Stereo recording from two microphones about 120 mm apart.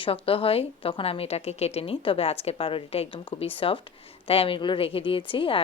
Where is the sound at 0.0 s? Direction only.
50° left (ahead or behind).